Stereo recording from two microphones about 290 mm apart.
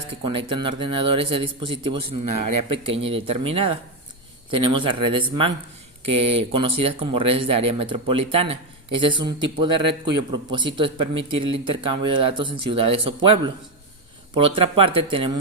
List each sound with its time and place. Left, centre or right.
0.3 s speech: centre
2.2 s a man's voice: right
2.6 s speech: centre